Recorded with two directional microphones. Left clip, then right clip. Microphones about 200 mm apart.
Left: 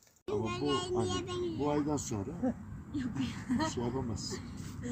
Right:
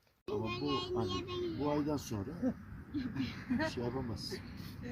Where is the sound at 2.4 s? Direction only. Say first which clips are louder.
Left 2 dB; 50° right (ahead or behind).